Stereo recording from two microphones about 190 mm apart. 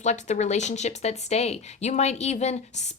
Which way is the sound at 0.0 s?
35° left (ahead or behind).